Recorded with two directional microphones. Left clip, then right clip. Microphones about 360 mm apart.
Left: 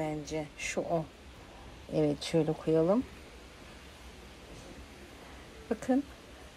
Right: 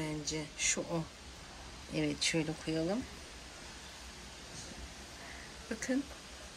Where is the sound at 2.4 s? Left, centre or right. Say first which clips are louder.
Left 8 dB; left.